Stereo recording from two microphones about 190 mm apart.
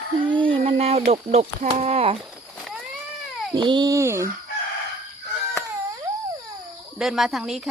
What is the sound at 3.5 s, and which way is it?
Speech, 20° right (ahead or behind).